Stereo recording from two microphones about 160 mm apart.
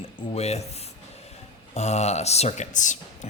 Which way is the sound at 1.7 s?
45° left (ahead or behind).